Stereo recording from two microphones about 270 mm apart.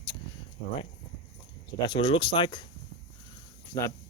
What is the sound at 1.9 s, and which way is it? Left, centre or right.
Speech, centre.